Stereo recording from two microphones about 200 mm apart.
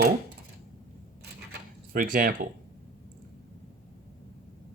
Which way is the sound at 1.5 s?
45° right (ahead or behind).